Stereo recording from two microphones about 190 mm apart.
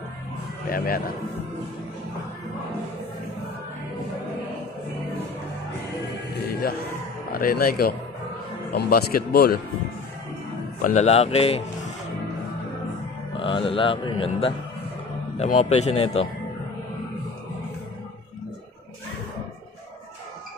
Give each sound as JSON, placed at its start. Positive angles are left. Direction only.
{"t": 0.7, "sound": "speech", "side_deg": 50}
{"t": 6.3, "sound": "music", "side_deg": 60}
{"t": 7.3, "sound": "speech", "side_deg": 50}
{"t": 10.8, "sound": "speech", "side_deg": 35}
{"t": 13.4, "sound": "a man's voice", "side_deg": 30}